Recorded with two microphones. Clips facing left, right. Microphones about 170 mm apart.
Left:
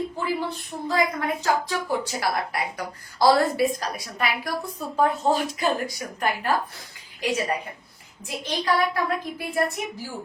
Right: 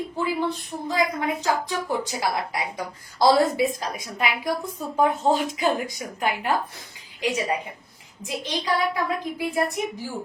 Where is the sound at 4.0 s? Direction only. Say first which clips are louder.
Right 1 dB; 20° right (ahead or behind).